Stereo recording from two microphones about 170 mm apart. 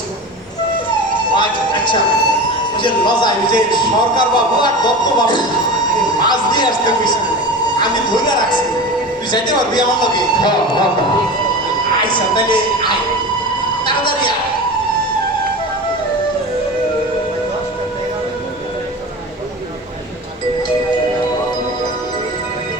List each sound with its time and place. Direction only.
1.4 s a man's voice: 30° left (ahead or behind)
11.9 s speech: 25° left (ahead or behind)
13.8 s a sound: 30° left (ahead or behind)